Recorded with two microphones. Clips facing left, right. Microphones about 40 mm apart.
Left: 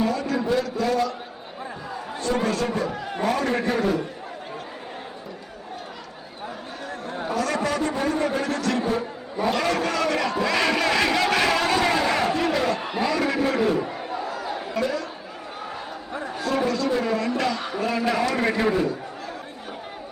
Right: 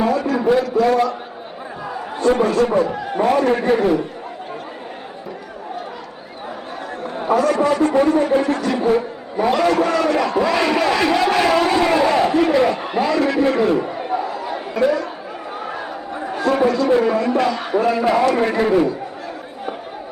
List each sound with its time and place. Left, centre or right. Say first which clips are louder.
0.1 s a sound: right 6 dB; centre
0.6 s crowd: right 8 dB; centre
2.2 s a man's voice: right 8 dB; right
7.0 s a sound: right 5 dB; centre
7.3 s a man's voice: right 9 dB; right
10.2 s crowd: right 5 dB; centre
11.0 s a man's voice: right 5 dB; centre
11.5 s a sound: right 6 dB; right
12.5 s a man's voice: right 7 dB; right
13.6 s a sound: right 5 dB; centre
16.1 s speech: right 7 dB; centre
18.0 s a man's voice: right 5 dB; right